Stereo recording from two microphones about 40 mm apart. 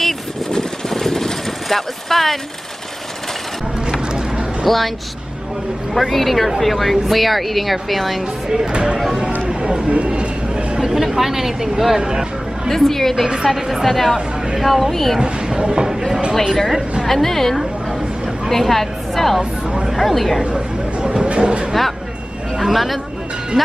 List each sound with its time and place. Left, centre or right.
0.0 s vehicle: centre
4.6 s a woman's voice: centre
5.9 s a woman's voice: centre
9.5 s a sound: centre
11.0 s speech: centre
12.0 s speech: right
12.6 s a woman's voice: centre
13.5 s a woman's voice: centre
15.1 s speech: right
16.5 s a woman's voice: centre
20.5 s chatter: right
22.6 s a woman's voice: centre